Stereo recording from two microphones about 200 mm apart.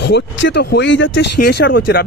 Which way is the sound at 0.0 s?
60° left (ahead or behind).